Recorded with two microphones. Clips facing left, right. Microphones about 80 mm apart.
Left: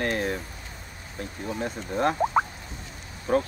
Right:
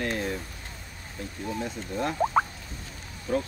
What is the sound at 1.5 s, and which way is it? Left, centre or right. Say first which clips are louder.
Speech: left 2 dB; left.